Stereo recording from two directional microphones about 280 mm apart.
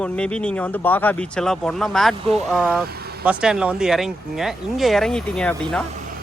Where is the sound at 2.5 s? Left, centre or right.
Centre.